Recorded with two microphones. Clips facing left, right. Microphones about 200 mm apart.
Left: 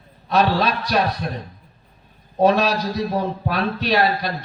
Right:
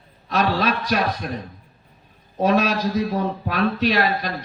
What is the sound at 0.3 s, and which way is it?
Speech, 35° left (ahead or behind).